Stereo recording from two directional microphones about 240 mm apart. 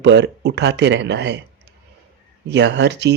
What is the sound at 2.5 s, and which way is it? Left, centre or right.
Speech, right.